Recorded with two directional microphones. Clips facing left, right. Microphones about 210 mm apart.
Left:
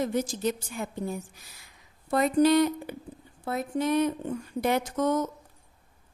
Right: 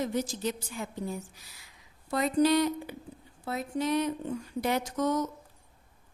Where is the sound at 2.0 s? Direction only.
55° left (ahead or behind).